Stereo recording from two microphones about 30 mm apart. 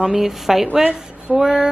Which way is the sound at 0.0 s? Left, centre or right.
Centre.